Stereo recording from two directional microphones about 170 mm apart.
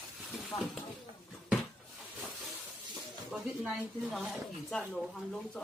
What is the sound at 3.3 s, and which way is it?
Speech, centre (ahead or behind).